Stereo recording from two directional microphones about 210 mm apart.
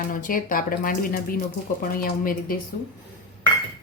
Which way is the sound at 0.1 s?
40° left (ahead or behind).